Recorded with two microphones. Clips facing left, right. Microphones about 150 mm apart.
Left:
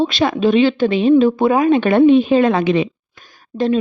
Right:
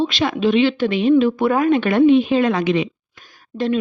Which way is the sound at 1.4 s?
20° left (ahead or behind).